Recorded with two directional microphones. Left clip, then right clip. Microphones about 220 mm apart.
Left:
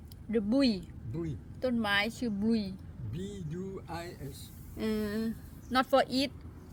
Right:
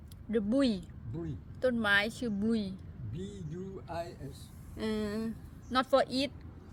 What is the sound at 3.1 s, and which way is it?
Speech, 40° left (ahead or behind).